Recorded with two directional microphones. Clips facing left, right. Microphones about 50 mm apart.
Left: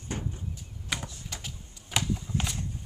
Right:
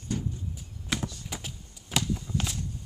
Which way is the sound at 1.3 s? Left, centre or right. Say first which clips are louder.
Right 2 dB; centre.